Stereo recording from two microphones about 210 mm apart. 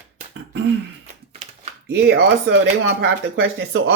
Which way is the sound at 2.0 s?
50° right (ahead or behind).